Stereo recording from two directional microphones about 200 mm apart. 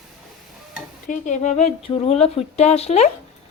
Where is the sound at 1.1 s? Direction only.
40° left (ahead or behind).